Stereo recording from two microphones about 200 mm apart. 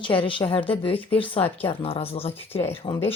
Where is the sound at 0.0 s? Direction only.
25° left (ahead or behind).